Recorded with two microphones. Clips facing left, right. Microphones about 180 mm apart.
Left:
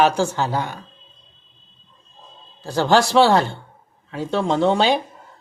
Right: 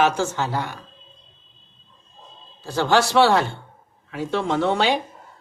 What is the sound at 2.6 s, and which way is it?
Speech, 15° left (ahead or behind).